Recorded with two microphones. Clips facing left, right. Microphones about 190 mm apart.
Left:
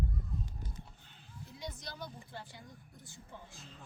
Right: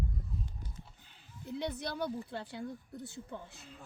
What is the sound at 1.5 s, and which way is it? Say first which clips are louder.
Speech: right 10 dB; 65° right (ahead or behind).